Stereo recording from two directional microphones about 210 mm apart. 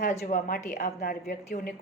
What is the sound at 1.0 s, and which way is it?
Speech, 45° left (ahead or behind).